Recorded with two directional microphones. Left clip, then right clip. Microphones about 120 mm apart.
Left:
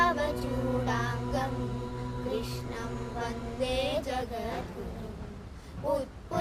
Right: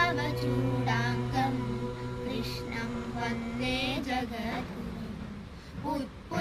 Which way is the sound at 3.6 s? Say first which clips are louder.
Left 3 dB; 40° left (ahead or behind).